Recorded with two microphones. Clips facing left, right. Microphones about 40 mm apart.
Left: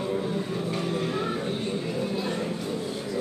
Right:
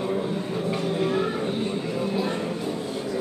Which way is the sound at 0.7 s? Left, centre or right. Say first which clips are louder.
Right 7 dB; centre.